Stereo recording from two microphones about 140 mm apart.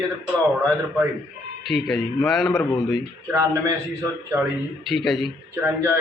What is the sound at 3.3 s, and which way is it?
Speech, 25° right (ahead or behind).